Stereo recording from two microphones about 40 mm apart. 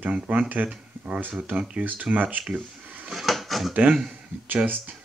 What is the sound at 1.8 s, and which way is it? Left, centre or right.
Speech, right.